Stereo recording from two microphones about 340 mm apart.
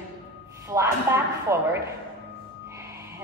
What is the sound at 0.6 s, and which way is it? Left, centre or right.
Speech, centre.